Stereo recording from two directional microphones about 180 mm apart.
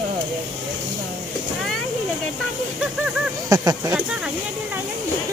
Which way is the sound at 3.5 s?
20° right (ahead or behind).